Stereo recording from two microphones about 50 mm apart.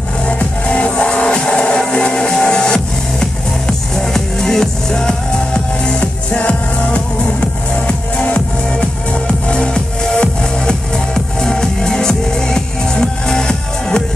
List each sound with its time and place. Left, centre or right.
0.3 s music: left
9.5 s music: centre